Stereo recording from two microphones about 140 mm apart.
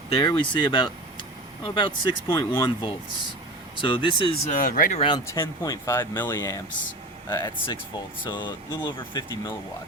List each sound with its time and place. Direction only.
0.2 s speech: 35° left (ahead or behind)
2.3 s speech: 20° left (ahead or behind)
2.6 s speech: 35° left (ahead or behind)
4.5 s speech: 85° left
4.9 s speech: 35° left (ahead or behind)
5.3 s speech: 25° left (ahead or behind)